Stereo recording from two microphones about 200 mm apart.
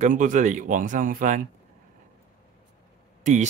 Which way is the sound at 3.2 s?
40° right (ahead or behind).